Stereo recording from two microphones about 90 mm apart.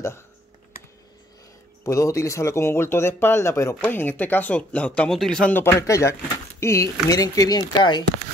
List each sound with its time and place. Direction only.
1.9 s speech: 35° left (ahead or behind)
3.8 s speech: 20° left (ahead or behind); by 5.5 s 5° left (ahead or behind)
5.5 s speech: 25° left (ahead or behind); by 8.0 s 50° left (ahead or behind)